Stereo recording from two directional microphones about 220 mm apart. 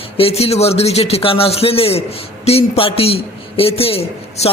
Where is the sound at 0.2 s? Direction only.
25° left (ahead or behind).